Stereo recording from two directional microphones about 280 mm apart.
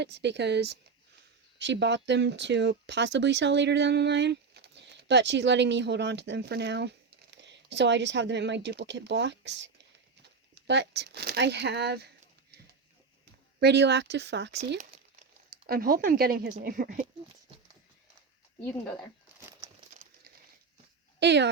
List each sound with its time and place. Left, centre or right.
0.0 s speech: right
13.6 s speech: right
15.6 s speech: right
21.2 s speech: right